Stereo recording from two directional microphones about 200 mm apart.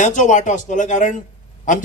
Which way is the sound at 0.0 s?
40° left (ahead or behind).